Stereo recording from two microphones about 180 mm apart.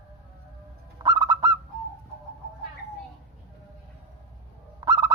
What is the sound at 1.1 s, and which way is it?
Bird, 20° right (ahead or behind).